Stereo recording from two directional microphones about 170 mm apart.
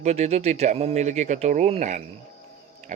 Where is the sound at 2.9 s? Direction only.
45° right (ahead or behind).